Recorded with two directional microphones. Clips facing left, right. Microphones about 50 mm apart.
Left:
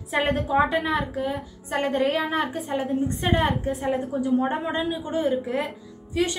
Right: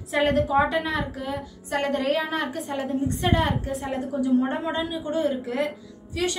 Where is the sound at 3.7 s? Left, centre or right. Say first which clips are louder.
Left 4 dB; centre.